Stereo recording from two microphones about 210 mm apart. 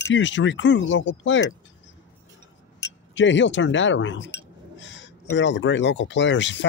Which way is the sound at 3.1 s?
60° left (ahead or behind).